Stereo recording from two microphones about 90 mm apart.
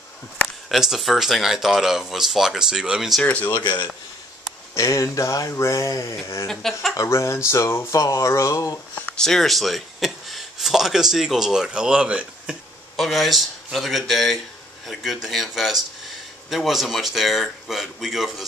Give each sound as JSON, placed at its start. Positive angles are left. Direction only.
{"t": 0.7, "sound": "speech", "side_deg": -5}
{"t": 3.2, "sound": "speech", "side_deg": 15}
{"t": 3.4, "sound": "speech", "side_deg": 55}
{"t": 4.7, "sound": "speech", "side_deg": 35}
{"t": 6.4, "sound": "speech", "side_deg": 5}
{"t": 7.0, "sound": "speech", "side_deg": 35}
{"t": 9.1, "sound": "speech", "side_deg": 5}
{"t": 12.9, "sound": "speech", "side_deg": 0}